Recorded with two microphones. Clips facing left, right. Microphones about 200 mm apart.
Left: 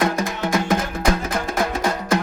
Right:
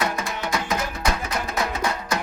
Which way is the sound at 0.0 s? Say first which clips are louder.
Left 5 dB; 50° left (ahead or behind).